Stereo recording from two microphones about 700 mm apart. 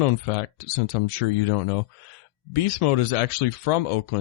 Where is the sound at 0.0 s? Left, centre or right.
Left.